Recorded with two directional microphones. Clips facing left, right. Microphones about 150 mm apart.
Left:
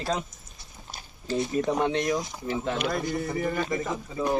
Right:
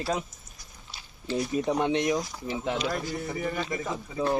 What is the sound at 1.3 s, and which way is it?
Speech, 40° left (ahead or behind).